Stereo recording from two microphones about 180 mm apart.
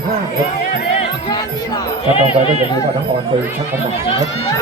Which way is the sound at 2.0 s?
30° left (ahead or behind).